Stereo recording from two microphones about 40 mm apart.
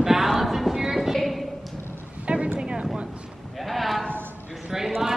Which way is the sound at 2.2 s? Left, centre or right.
Right.